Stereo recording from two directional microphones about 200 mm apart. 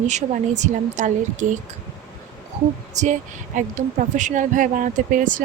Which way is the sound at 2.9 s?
35° right (ahead or behind).